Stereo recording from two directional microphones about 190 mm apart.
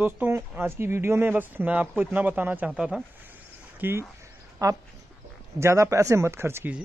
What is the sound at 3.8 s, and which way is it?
Speech, 10° right (ahead or behind).